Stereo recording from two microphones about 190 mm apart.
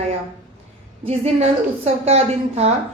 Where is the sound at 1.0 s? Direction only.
35° right (ahead or behind).